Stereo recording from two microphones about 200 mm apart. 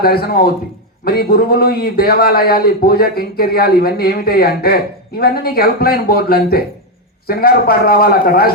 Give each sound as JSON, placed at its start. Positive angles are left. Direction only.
{"t": 0.0, "sound": "a man's voice", "side_deg": 50}